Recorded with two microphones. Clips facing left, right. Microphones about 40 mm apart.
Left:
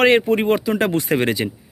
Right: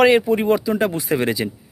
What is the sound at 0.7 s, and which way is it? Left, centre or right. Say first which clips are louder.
Speech: left 1 dB; left.